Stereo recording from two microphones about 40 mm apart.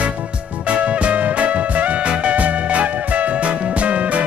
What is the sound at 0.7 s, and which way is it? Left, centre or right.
Music, right.